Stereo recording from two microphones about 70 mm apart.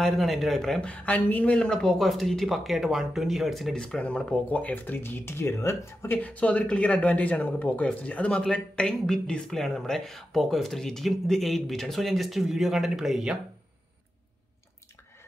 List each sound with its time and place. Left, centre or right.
0.0 s speech: centre
0.7 s speech: centre
3.7 s speech: centre; by 6.1 s left
6.1 s speech: left; by 13.4 s centre